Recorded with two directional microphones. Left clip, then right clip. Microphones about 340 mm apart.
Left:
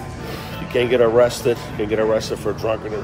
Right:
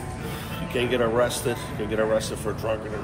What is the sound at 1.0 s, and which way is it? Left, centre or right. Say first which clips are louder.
Speech: left 9 dB; left.